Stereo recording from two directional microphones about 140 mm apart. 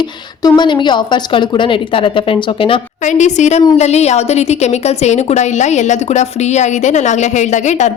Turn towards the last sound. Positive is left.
turn(degrees=55)  # may be behind; listen again after turning